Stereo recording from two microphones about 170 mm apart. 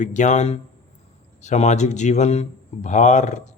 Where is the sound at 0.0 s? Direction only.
45° left (ahead or behind).